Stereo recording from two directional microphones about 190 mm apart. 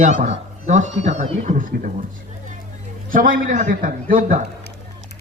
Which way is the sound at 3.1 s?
45° right (ahead or behind).